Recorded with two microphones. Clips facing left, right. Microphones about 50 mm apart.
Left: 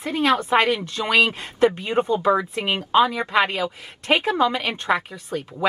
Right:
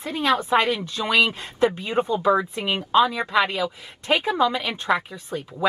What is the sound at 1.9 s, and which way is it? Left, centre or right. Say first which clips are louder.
Speech: left 2 dB; centre.